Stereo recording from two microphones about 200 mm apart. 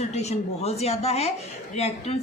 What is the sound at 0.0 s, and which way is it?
A woman's voice, 35° left (ahead or behind).